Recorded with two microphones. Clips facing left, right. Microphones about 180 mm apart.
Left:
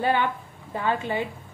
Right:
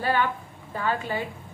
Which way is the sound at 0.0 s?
20° left (ahead or behind).